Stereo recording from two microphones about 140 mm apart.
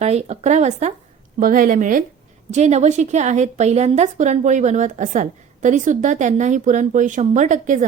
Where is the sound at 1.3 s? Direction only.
75° right (ahead or behind).